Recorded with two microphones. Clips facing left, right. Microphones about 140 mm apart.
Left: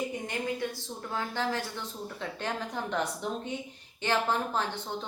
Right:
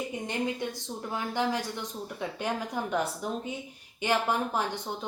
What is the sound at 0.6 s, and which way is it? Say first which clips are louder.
A woman's voice: right 1 dB; 20° right (ahead or behind).